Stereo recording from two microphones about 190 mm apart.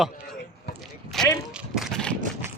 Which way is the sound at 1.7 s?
Centre (ahead or behind).